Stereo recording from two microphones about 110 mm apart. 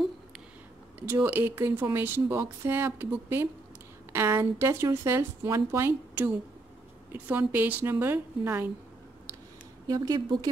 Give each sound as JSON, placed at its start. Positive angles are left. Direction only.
{"t": 1.0, "sound": "speech", "side_deg": -15}
{"t": 9.8, "sound": "a woman's voice", "side_deg": -35}